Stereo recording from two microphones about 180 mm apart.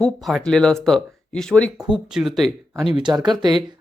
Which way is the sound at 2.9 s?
25° right (ahead or behind).